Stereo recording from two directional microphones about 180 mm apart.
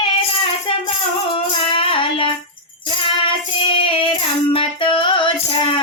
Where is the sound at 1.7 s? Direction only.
30° left (ahead or behind).